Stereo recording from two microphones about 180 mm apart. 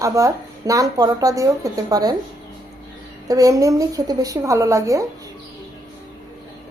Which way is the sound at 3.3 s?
20° right (ahead or behind).